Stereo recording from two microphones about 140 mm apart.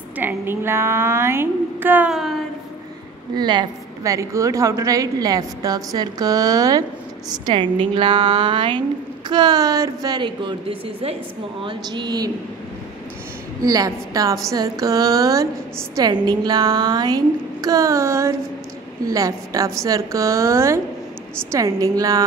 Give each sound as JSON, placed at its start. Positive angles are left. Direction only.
{"t": 0.2, "sound": "a woman's voice", "side_deg": -15}
{"t": 2.1, "sound": "speech", "side_deg": 0}
{"t": 3.3, "sound": "a woman's voice", "side_deg": -30}
{"t": 13.6, "sound": "a woman's voice", "side_deg": -25}